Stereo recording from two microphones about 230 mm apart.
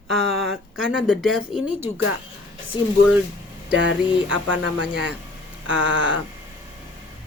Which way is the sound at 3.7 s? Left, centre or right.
Right.